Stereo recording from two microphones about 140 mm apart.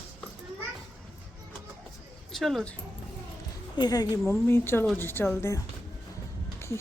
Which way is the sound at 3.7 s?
30° left (ahead or behind).